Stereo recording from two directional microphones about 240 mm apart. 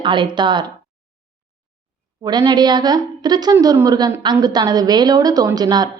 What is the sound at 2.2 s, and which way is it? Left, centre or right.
A woman's voice, centre.